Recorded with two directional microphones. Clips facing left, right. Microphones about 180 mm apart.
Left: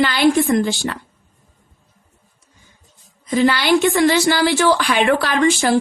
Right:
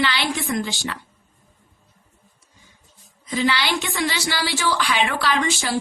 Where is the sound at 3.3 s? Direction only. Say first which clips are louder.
Left 7 dB; 50° left (ahead or behind).